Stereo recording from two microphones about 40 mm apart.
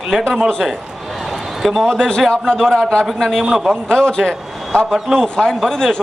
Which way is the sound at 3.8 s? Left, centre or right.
Centre.